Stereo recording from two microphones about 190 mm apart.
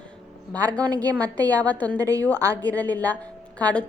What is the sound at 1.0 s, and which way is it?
Speech, 10° left (ahead or behind).